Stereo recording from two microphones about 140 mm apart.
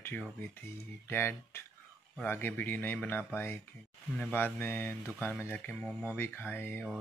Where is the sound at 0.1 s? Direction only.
10° left (ahead or behind).